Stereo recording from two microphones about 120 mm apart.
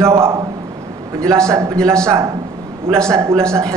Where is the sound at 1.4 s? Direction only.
25° right (ahead or behind).